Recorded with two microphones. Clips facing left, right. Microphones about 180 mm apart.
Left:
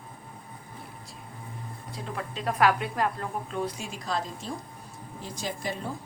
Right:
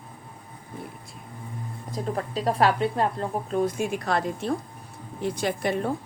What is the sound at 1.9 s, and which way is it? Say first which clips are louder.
Speech: right 8 dB; 40° right (ahead or behind).